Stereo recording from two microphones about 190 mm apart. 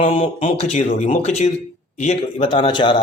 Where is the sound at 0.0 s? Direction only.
35° left (ahead or behind).